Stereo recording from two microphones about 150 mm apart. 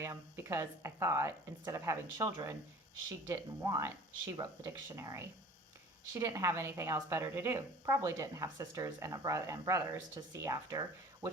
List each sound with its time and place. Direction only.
0.0 s a woman's voice: 20° right (ahead or behind)